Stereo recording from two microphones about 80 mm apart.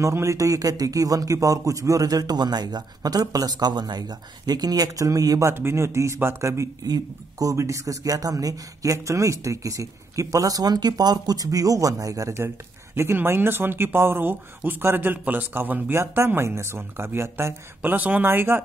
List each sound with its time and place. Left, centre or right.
0.0 s speech: right
5.4 s speech: right
12.9 s speech: right
17.9 s speech: right